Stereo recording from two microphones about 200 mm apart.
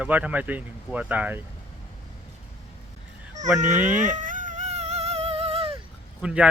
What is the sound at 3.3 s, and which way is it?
Baby cry, 35° right (ahead or behind).